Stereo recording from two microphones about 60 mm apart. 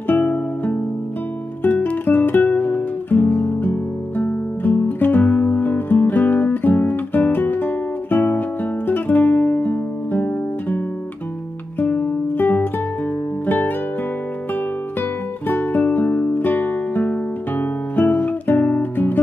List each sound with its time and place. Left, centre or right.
0.0 s music: left
1.6 s guitar: left
4.2 s music: left
11.8 s music: left
15.4 s music: left